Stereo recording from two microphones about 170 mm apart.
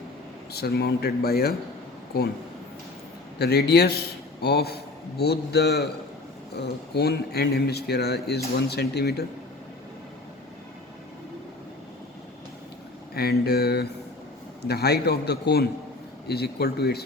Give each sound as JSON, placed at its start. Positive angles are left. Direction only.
{"t": 0.5, "sound": "speech", "side_deg": 70}
{"t": 3.3, "sound": "speech", "side_deg": 75}
{"t": 13.1, "sound": "speech", "side_deg": 65}